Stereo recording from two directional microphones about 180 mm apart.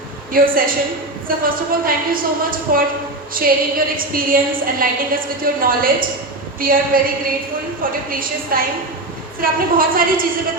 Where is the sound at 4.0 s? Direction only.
50° right (ahead or behind).